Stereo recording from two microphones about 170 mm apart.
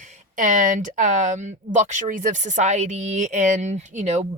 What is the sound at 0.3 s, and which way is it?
A woman's voice, 50° right (ahead or behind).